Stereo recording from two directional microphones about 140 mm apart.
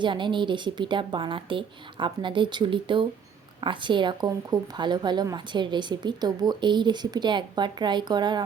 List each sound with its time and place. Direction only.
0.0 s a woman's voice: 35° right (ahead or behind)